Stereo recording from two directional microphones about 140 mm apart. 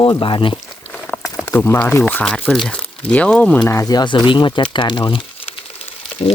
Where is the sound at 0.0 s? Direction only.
35° left (ahead or behind).